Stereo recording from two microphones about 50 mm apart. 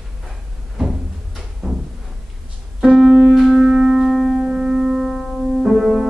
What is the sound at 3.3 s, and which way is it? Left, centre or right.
Music, centre.